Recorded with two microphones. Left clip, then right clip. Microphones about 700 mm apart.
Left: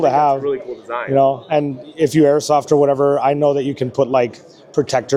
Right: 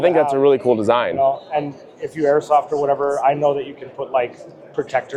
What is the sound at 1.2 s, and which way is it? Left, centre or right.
Speech, left.